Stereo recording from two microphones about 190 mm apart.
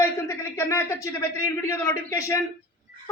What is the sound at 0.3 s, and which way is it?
A man's voice, 15° left (ahead or behind).